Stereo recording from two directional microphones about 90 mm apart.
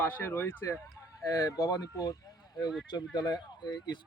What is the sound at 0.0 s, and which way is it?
Speech, 20° left (ahead or behind).